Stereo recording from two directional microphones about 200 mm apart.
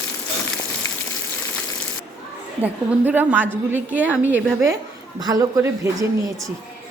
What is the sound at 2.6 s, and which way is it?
A woman's voice, 10° right (ahead or behind).